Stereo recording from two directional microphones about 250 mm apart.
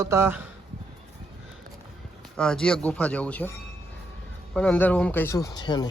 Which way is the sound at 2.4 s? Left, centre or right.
Centre.